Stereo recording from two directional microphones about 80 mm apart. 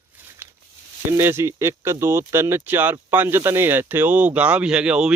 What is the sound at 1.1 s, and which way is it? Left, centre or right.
Speech, right.